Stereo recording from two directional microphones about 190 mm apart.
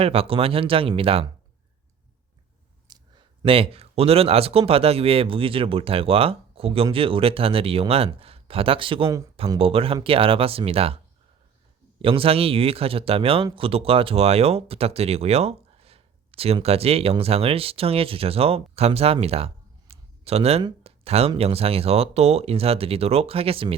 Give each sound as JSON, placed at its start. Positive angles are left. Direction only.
{"t": 0.0, "sound": "speech", "side_deg": -30}
{"t": 2.8, "sound": "speech", "side_deg": -25}
{"t": 9.3, "sound": "speech", "side_deg": -30}
{"t": 12.0, "sound": "speech", "side_deg": -30}